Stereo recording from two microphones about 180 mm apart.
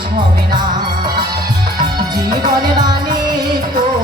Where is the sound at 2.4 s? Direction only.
25° right (ahead or behind).